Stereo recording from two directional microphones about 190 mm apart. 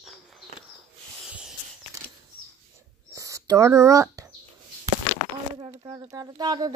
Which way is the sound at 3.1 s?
15° right (ahead or behind).